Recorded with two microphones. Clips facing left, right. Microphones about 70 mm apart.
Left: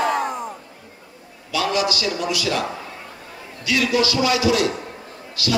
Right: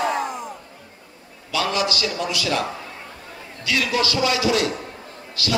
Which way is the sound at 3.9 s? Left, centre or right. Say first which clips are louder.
Left 2 dB; right.